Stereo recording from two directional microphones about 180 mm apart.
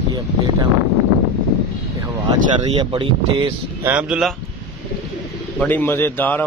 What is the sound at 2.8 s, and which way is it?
Speech, 30° right (ahead or behind).